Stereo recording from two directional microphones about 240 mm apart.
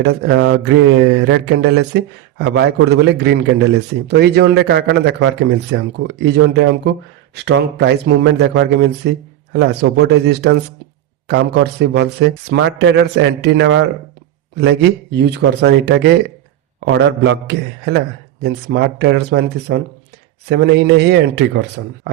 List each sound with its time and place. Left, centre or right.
0.0 s mantra: right